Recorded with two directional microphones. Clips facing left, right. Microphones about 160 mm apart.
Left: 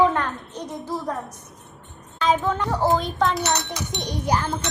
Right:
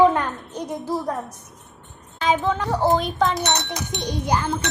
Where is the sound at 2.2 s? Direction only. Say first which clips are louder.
Even; 5° right (ahead or behind).